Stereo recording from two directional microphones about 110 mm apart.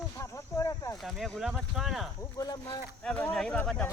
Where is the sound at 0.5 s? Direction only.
30° left (ahead or behind).